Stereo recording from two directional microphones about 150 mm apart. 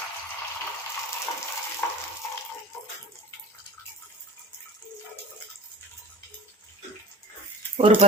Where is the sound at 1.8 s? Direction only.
10° left (ahead or behind).